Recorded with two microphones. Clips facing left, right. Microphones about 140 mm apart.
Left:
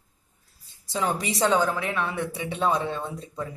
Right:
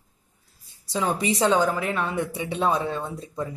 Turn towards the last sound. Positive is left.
turn(degrees=-15)  # may be behind; listen again after turning